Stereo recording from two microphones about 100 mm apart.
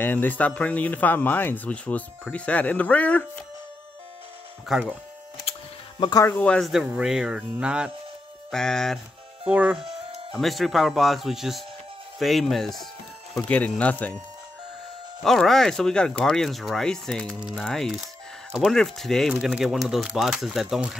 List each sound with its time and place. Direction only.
0.0 s speech: 20° left (ahead or behind)
4.7 s speech: 5° right (ahead or behind)
5.9 s speech: 40° left (ahead or behind)
6.2 s speech: 15° left (ahead or behind)
6.6 s speech: 5° right (ahead or behind)
8.5 s speech: 5° left (ahead or behind)
9.5 s speech: 15° right (ahead or behind)
10.3 s speech: centre (ahead or behind)
13.5 s speech: 15° left (ahead or behind)
15.2 s speech: 5° left (ahead or behind)
17.4 s speech: 10° right (ahead or behind)
17.6 s speech: 5° left (ahead or behind)